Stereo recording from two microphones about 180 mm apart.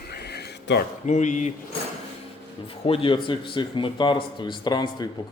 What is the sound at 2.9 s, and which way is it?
Speech, 30° left (ahead or behind).